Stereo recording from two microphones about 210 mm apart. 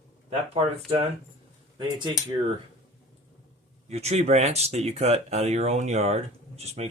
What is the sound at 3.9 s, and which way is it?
Speech, 30° right (ahead or behind).